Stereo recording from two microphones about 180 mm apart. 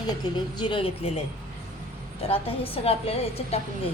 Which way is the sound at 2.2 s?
30° left (ahead or behind).